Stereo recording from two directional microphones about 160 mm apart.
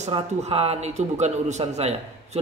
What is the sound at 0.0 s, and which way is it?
A man's voice, 40° right (ahead or behind).